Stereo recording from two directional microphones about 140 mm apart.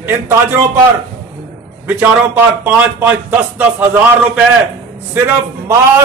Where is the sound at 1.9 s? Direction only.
10° right (ahead or behind).